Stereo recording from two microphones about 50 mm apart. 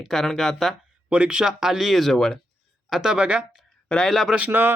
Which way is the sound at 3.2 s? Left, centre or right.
Right.